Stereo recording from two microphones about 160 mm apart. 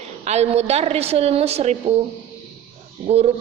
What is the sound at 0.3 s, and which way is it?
A woman's voice, 40° right (ahead or behind).